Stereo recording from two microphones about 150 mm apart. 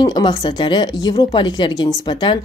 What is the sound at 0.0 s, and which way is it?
Speech, 30° left (ahead or behind).